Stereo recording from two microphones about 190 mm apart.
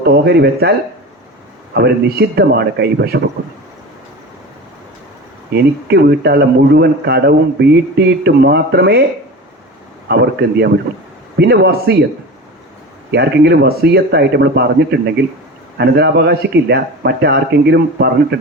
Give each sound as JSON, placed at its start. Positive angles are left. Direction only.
{"t": 0.0, "sound": "speech", "side_deg": -60}
{"t": 1.7, "sound": "speech", "side_deg": -55}
{"t": 5.9, "sound": "speech", "side_deg": -55}
{"t": 10.1, "sound": "speech", "side_deg": -60}
{"t": 13.1, "sound": "speech", "side_deg": -60}